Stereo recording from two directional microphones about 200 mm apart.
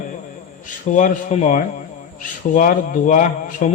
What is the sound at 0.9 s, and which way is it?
A man's voice, 40° left (ahead or behind).